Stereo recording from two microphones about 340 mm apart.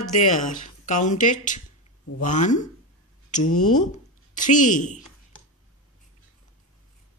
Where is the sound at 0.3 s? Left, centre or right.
Left.